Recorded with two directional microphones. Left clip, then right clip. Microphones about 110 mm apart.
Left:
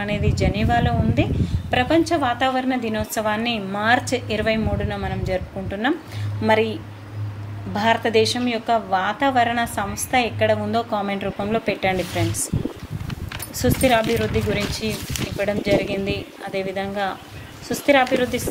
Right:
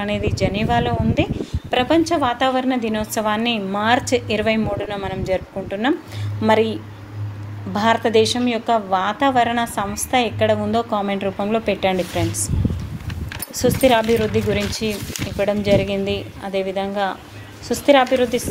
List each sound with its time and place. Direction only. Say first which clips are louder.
0.4 s a woman's voice: right 1 dB; 40° right (ahead or behind)
7.7 s a woman's voice: right 2 dB; 45° right (ahead or behind)
11.3 s a woman's voice: right 2 dB; 30° right (ahead or behind)
13.6 s a woman's voice: right 3 dB; 35° right (ahead or behind)